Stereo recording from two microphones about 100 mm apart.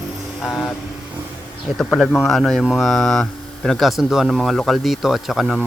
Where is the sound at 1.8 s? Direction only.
Centre (ahead or behind).